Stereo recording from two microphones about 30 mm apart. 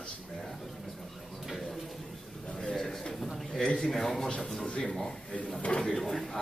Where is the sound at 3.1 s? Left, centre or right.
Centre.